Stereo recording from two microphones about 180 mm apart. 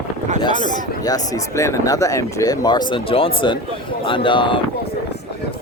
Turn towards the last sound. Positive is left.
turn(degrees=25)  # may be behind; listen again after turning